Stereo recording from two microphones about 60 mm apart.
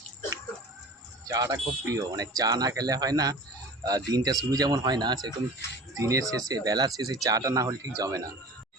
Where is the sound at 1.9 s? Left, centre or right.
Right.